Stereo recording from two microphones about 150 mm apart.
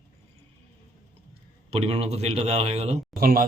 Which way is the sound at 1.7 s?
40° right (ahead or behind).